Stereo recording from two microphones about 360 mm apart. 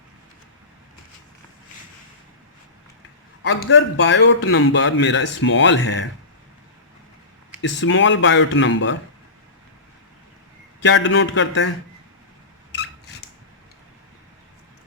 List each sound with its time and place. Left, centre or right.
3.4 s a man's voice: left
7.6 s a man's voice: left
10.8 s a man's voice: left